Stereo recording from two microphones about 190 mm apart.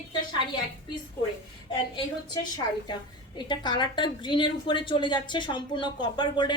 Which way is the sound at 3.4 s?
25° left (ahead or behind).